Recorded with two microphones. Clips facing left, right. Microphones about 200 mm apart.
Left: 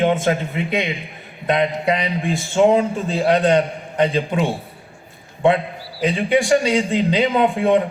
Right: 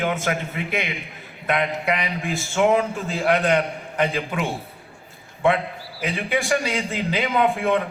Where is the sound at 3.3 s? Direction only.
30° left (ahead or behind).